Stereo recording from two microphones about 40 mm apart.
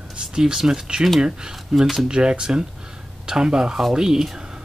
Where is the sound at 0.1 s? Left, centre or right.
Centre.